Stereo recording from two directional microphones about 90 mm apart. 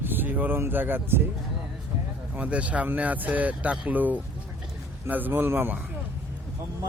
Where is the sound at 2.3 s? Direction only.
15° right (ahead or behind).